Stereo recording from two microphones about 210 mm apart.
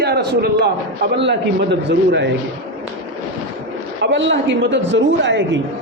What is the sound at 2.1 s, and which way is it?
Speech, 55° right (ahead or behind).